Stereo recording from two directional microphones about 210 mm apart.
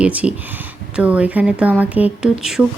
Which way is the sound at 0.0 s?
5° right (ahead or behind).